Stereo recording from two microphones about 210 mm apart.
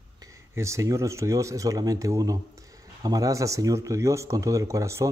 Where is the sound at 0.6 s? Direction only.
15° right (ahead or behind).